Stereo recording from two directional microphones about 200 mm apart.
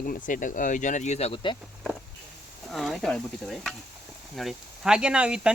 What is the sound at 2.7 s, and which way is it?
Speech, centre (ahead or behind).